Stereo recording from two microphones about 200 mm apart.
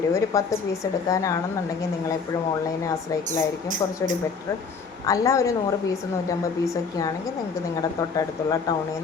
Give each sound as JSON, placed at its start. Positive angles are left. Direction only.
{"t": 0.1, "sound": "a woman's voice", "side_deg": 15}
{"t": 5.0, "sound": "a woman's voice", "side_deg": 15}
{"t": 7.8, "sound": "a woman's voice", "side_deg": 15}